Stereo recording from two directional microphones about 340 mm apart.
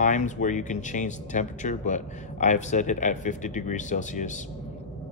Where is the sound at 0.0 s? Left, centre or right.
Left.